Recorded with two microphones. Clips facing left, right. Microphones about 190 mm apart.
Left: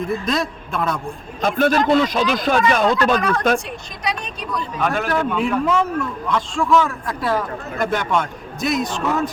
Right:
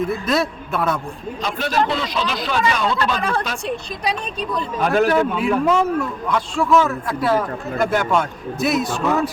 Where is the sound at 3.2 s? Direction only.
30° right (ahead or behind).